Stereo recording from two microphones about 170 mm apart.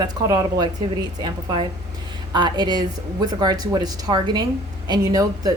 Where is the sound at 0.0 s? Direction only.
25° right (ahead or behind).